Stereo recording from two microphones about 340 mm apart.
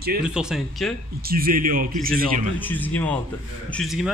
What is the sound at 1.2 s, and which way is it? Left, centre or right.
A man's voice, right.